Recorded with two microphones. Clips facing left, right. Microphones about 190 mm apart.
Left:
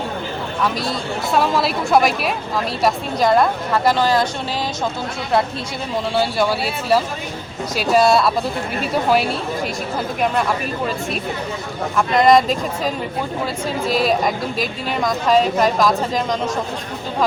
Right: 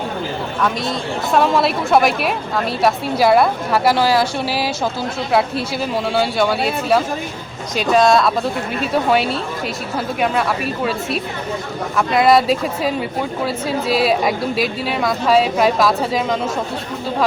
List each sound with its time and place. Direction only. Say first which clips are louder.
0.6 s speech: right 1 dB; centre (ahead or behind)
6.1 s speech: right 1 dB; centre (ahead or behind)
7.8 s speech: right 1 dB; 5° left (ahead or behind)
11.9 s speech: even; 5° right (ahead or behind)
13.8 s speech: right 1 dB; 45° left (ahead or behind)
14.8 s speech: left 1 dB; 5° right (ahead or behind)